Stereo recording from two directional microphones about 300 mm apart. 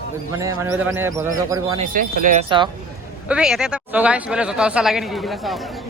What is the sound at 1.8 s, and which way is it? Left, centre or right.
Speech, right.